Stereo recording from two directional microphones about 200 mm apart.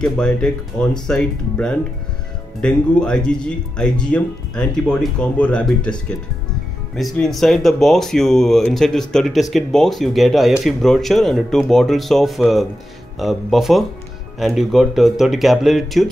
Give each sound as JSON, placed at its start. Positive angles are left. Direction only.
{"t": 0.0, "sound": "speech", "side_deg": 5}